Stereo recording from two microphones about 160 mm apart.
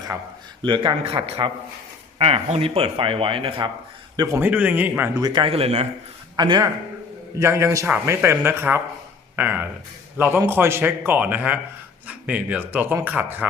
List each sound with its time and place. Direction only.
0.6 s speech: 30° right (ahead or behind)
4.2 s a man's voice: 15° right (ahead or behind)
5.2 s speech: 30° right (ahead or behind)
6.3 s a man's voice: 25° right (ahead or behind)